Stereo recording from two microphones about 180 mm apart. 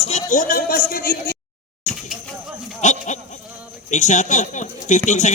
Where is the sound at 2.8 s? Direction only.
40° left (ahead or behind).